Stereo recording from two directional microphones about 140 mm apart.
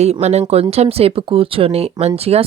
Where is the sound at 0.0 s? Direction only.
50° right (ahead or behind).